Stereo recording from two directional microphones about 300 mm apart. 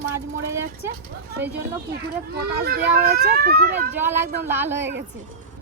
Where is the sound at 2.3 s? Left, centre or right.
Right.